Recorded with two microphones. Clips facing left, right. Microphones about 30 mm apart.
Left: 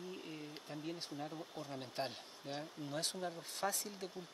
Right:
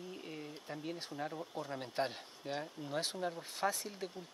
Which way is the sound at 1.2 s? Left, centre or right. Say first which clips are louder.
Right 4 dB; right.